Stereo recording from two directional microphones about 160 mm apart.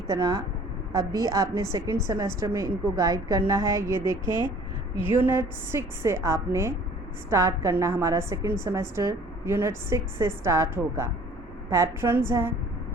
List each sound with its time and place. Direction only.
0.1 s a woman's voice: 20° right (ahead or behind)